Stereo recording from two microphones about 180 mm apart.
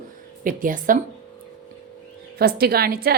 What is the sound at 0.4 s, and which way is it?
Speech, 50° right (ahead or behind).